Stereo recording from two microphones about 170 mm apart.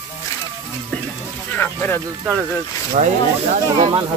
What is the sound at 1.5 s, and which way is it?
Speech, 10° left (ahead or behind).